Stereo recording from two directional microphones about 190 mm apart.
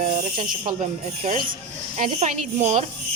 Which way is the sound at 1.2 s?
45° right (ahead or behind).